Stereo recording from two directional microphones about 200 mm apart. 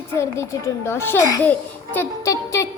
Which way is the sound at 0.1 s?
15° left (ahead or behind).